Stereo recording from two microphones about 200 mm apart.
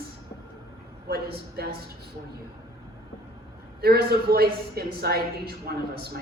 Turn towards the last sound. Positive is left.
turn(degrees=-50)  # may be behind; listen again after turning